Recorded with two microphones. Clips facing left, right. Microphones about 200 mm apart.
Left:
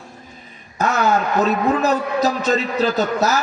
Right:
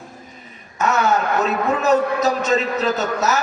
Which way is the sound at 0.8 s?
35° left (ahead or behind).